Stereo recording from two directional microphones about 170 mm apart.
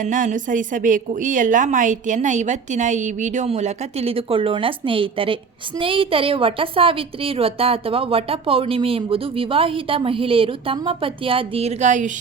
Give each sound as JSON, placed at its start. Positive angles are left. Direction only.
{"t": 0.0, "sound": "a woman's voice", "side_deg": -50}